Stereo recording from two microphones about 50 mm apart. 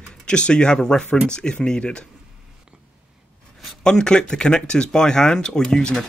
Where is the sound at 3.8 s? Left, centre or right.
Centre.